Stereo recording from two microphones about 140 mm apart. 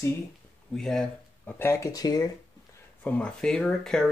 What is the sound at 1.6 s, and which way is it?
Speech, 20° left (ahead or behind).